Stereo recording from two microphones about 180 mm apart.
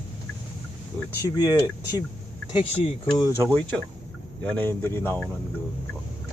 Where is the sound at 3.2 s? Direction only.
15° left (ahead or behind).